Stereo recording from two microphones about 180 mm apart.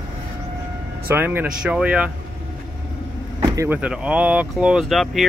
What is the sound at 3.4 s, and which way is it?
Speech, 15° right (ahead or behind).